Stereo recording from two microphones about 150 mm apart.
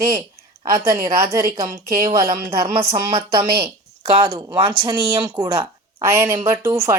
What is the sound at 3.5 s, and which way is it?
Speech, 90° right.